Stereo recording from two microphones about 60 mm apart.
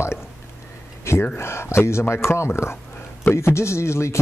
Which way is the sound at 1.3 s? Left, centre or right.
Left.